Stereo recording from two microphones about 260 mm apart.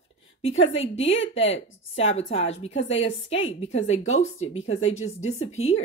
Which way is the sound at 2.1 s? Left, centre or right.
Left.